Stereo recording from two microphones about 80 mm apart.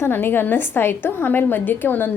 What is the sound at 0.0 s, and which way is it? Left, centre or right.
A woman's voice, left.